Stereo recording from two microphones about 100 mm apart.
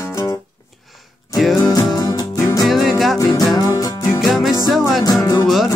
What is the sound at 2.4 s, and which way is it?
Music, 30° left (ahead or behind).